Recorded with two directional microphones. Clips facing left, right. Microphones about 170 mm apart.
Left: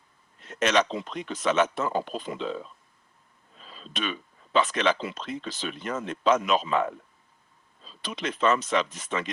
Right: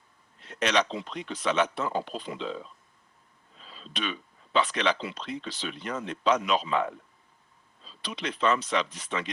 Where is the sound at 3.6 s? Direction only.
45° left (ahead or behind).